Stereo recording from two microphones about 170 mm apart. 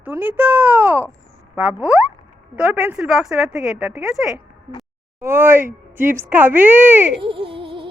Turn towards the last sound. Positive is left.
turn(degrees=-30)  # may be behind; listen again after turning